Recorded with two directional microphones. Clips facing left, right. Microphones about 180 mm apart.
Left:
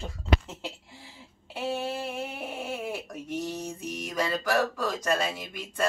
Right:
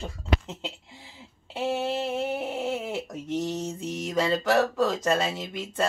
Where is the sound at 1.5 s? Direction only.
25° right (ahead or behind).